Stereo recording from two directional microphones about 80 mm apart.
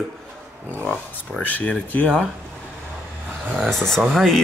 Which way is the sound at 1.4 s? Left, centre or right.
Centre.